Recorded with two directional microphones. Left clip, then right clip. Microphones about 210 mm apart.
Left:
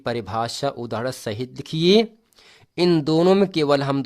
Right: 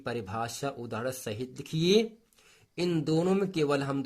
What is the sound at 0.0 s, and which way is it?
Speech, 35° left (ahead or behind).